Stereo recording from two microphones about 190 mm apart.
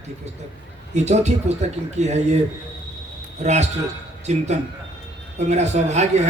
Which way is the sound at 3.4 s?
35° right (ahead or behind).